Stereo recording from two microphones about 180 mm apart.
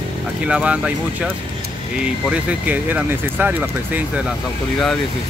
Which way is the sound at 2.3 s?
5° right (ahead or behind).